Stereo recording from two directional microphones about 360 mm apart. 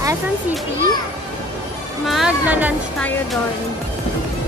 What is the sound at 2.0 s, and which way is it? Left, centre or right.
Speech, centre.